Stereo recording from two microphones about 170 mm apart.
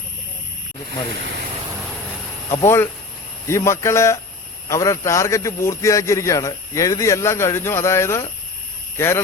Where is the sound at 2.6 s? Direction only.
15° left (ahead or behind).